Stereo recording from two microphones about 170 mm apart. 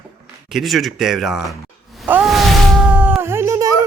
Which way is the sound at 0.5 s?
Centre (ahead or behind).